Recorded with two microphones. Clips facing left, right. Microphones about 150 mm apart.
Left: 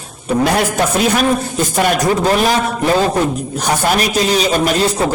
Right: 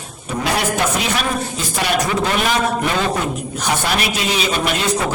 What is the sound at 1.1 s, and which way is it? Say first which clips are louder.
A man's voice: left 6 dB; 45° left (ahead or behind).